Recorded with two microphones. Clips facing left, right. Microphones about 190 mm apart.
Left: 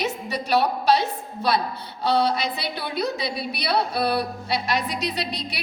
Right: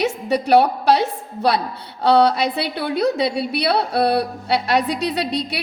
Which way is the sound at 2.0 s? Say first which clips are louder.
Right 7 dB; 70° right (ahead or behind).